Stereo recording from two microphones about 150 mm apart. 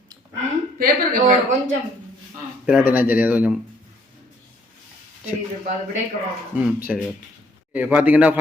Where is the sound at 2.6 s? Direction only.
10° right (ahead or behind).